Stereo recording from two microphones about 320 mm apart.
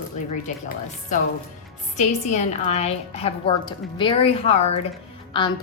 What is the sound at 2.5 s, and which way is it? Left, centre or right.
A woman's voice, centre.